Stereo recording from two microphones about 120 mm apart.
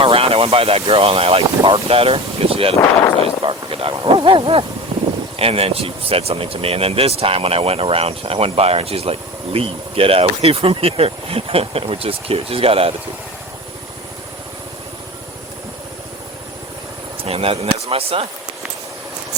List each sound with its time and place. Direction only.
0.0 s speech: 55° right (ahead or behind)
2.8 s speech: 25° left (ahead or behind)
3.2 s speech: 50° right (ahead or behind)
4.9 s a sound: 90° right
5.4 s speech: 55° right (ahead or behind)
17.2 s speech: 55° right (ahead or behind)